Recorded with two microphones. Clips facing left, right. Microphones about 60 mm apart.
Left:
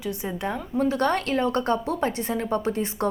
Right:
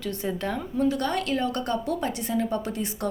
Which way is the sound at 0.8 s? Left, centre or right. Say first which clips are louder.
Left 2 dB; left.